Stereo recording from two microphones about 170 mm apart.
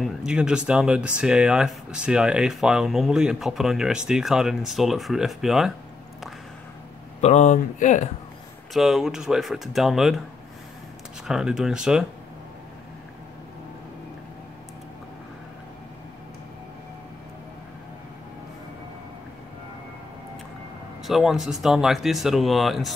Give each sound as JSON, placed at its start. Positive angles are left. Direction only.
{"t": 0.0, "sound": "speech", "side_deg": -5}
{"t": 7.2, "sound": "speech", "side_deg": 40}
{"t": 8.7, "sound": "speech", "side_deg": 0}
{"t": 11.2, "sound": "speech", "side_deg": -5}
{"t": 21.1, "sound": "speech", "side_deg": 0}